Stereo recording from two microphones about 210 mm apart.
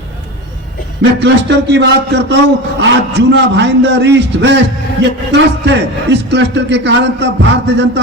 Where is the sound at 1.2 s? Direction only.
55° right (ahead or behind).